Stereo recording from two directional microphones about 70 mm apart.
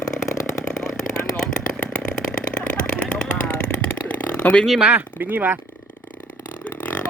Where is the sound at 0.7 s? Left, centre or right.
Centre.